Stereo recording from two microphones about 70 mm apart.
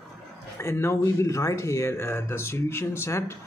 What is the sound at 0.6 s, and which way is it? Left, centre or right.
Speech, left.